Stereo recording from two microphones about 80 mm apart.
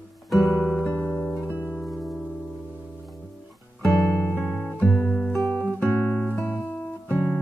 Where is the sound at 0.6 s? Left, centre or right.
Centre.